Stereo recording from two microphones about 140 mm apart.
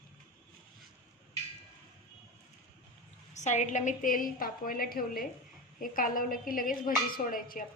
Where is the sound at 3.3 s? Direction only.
55° left (ahead or behind); by 5.2 s 90° left.